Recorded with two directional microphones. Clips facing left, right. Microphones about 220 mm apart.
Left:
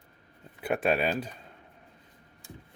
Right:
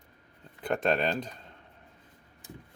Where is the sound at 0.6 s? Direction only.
10° left (ahead or behind).